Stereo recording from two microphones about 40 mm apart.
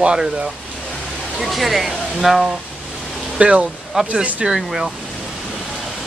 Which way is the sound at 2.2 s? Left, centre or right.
Centre.